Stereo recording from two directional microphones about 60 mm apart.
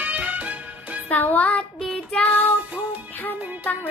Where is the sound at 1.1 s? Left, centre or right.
Left.